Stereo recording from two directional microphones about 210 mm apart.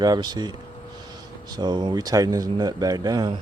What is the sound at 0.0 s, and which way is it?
Speech, 20° right (ahead or behind).